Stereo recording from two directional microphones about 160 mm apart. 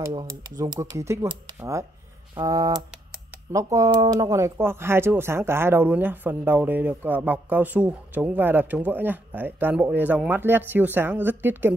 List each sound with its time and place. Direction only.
0.1 s speech: 20° right (ahead or behind)